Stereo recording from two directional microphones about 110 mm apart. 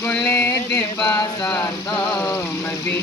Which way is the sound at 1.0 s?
35° left (ahead or behind).